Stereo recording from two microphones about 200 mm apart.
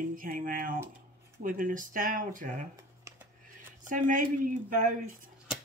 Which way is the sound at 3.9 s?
40° right (ahead or behind).